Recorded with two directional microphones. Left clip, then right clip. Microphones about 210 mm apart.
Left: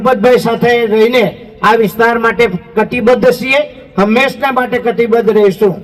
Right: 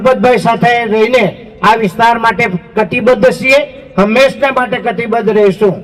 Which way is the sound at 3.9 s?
25° right (ahead or behind).